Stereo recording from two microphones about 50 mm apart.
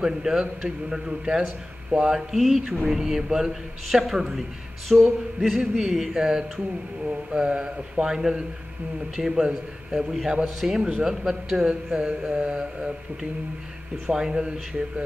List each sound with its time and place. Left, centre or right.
0.0 s a man's voice: centre